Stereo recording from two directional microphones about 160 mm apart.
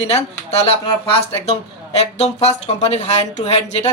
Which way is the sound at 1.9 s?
45° left (ahead or behind).